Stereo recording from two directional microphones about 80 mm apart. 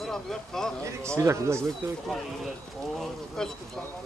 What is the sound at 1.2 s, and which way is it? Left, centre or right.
Speech, right.